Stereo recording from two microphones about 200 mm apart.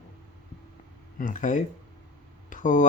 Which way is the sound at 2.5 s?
40° left (ahead or behind).